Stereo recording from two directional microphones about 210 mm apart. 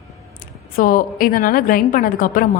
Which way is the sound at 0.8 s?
40° left (ahead or behind).